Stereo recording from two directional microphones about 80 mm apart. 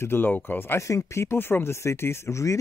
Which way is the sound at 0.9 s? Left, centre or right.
Left.